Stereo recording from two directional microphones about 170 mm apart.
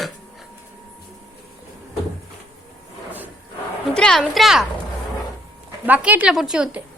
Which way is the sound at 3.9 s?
5° left (ahead or behind).